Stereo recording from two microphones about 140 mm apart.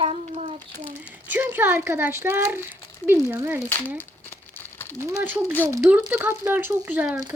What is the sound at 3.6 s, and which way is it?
Crumpling, 15° left (ahead or behind).